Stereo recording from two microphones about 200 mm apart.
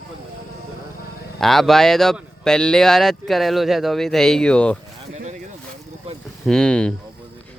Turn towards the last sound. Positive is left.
turn(degrees=5)  # may be behind; listen again after turning